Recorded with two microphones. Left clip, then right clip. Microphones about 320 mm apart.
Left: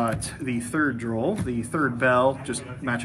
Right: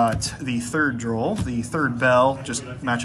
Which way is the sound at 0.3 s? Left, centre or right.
Centre.